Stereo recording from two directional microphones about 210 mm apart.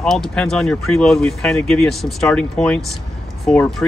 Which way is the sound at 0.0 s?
Centre (ahead or behind).